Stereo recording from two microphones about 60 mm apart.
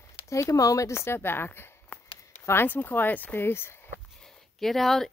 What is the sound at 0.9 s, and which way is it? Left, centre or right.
Speech, left.